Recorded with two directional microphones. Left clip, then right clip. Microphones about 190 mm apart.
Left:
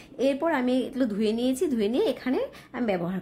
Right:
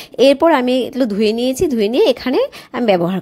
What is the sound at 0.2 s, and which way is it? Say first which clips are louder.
A woman's voice: right 14 dB; 35° right (ahead or behind).